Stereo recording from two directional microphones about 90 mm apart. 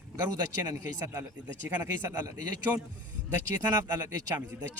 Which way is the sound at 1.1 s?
30° right (ahead or behind).